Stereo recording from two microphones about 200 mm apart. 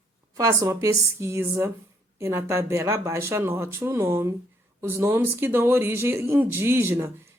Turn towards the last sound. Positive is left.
turn(degrees=-10)  # may be behind; listen again after turning